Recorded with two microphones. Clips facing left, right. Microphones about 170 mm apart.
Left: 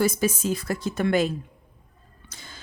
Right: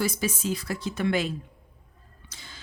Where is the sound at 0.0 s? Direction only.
45° left (ahead or behind).